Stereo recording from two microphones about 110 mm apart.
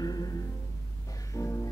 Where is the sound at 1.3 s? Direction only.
30° left (ahead or behind).